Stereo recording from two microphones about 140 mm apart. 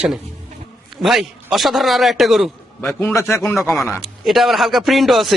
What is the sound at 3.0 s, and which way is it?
Speech, 20° left (ahead or behind).